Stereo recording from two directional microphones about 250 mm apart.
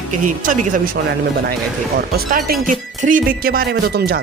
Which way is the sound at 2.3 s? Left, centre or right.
Right.